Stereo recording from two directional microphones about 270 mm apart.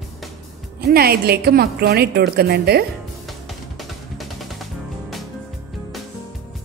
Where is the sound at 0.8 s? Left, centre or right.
Right.